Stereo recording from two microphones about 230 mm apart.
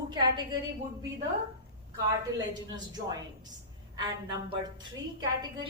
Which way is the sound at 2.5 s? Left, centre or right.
Centre.